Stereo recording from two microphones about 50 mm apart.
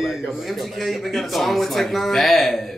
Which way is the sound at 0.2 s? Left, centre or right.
Centre.